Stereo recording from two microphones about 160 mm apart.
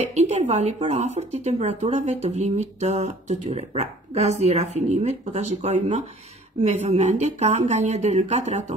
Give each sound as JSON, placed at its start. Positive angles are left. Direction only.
{"t": 0.0, "sound": "speech", "side_deg": -45}